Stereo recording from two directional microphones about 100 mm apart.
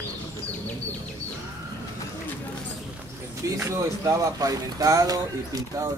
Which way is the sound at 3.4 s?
30° right (ahead or behind).